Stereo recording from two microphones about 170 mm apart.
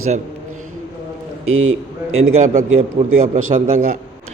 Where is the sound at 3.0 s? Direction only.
40° right (ahead or behind).